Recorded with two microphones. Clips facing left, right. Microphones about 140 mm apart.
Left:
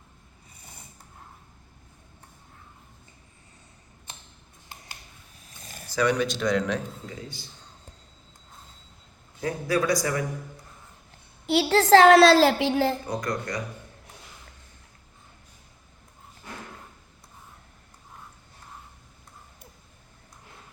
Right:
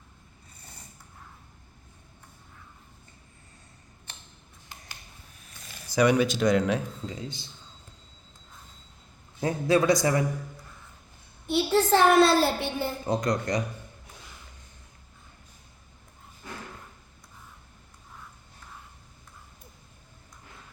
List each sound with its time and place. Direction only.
5.5 s a sound: 45° left (ahead or behind)
5.9 s speech: 10° right (ahead or behind)
7.2 s a man's voice: 25° right (ahead or behind)
9.4 s a man's voice: 25° right (ahead or behind)
11.4 s a woman's voice: 90° left
13.1 s a man's voice: 20° right (ahead or behind)